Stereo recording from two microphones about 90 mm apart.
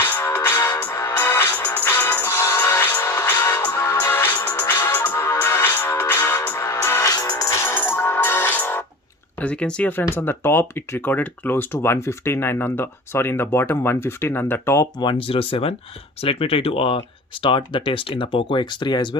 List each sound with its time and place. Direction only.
0.0 s music: 20° left (ahead or behind)
0.3 s music: 35° left (ahead or behind)
4.1 s music: 25° left (ahead or behind)
7.1 s music: 40° left (ahead or behind)
7.6 s music: 25° left (ahead or behind)
9.4 s speech: 15° left (ahead or behind); by 14.8 s 30° left (ahead or behind)
15.3 s speech: 90° left
17.4 s speech: 70° left (ahead or behind)